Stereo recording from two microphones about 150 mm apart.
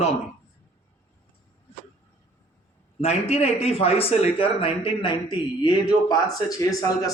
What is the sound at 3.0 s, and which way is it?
A man's voice, 45° left (ahead or behind).